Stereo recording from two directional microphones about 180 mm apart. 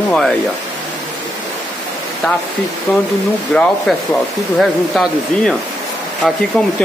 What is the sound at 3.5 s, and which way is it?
Speech, 5° left (ahead or behind).